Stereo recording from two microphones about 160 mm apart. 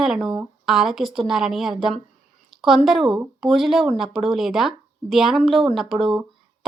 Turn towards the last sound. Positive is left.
turn(degrees=0)  # may be behind; listen again after turning